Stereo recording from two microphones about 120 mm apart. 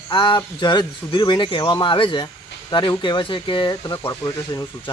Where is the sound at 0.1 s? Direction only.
40° left (ahead or behind).